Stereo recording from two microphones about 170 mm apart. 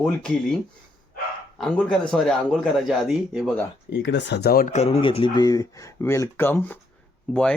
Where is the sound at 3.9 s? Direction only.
90° left; by 4.7 s 65° left (ahead or behind).